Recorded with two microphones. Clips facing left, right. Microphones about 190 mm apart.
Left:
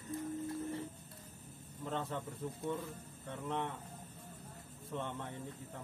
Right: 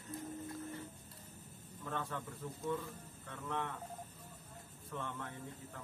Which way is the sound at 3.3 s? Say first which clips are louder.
Left 2 dB; 20° left (ahead or behind).